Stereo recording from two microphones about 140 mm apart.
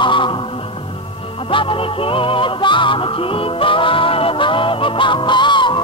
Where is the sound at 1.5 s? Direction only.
40° left (ahead or behind).